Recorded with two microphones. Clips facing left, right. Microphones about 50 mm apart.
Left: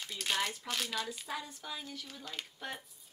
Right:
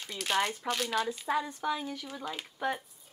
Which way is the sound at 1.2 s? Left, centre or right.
Right.